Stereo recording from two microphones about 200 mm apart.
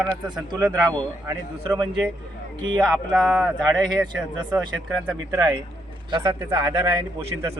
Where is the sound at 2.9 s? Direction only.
Centre (ahead or behind).